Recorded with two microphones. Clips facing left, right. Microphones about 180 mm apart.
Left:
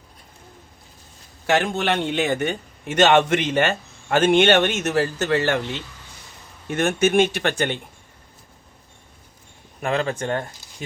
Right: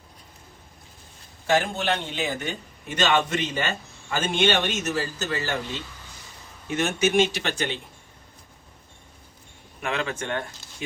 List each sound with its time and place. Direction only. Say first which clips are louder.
1.5 s a man's voice: left 3 dB; 70° left (ahead or behind)
6.7 s speech: left 4 dB; 55° left (ahead or behind)
9.8 s speech: left 5 dB; 35° left (ahead or behind)